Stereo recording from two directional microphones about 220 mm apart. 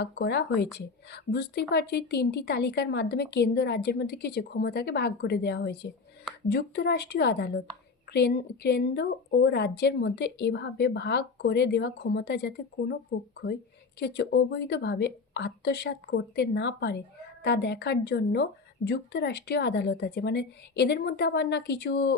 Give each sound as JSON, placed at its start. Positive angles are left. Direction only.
{"t": 0.0, "sound": "a woman's voice", "side_deg": 50}